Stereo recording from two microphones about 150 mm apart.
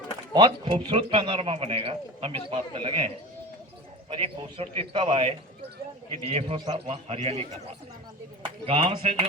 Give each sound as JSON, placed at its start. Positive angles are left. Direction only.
{"t": 0.3, "sound": "a man's voice", "side_deg": -30}
{"t": 4.1, "sound": "a man's voice", "side_deg": -40}
{"t": 8.6, "sound": "a man's voice", "side_deg": -40}